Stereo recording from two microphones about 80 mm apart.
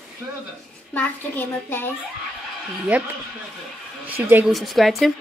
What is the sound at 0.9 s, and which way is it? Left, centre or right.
Speech, left.